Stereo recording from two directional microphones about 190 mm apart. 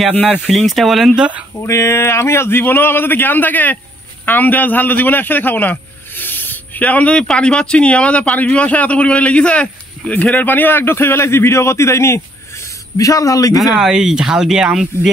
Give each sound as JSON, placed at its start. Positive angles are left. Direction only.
{"t": 0.2, "sound": "speech", "side_deg": 5}
{"t": 1.6, "sound": "a man's voice", "side_deg": 15}
{"t": 13.7, "sound": "speech", "side_deg": 0}